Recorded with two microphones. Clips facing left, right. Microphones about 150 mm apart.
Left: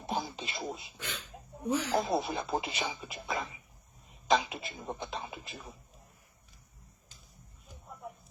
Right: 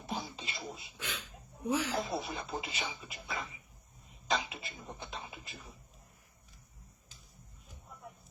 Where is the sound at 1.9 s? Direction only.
90° left.